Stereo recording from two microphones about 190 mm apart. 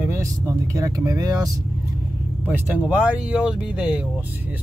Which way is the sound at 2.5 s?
5° right (ahead or behind).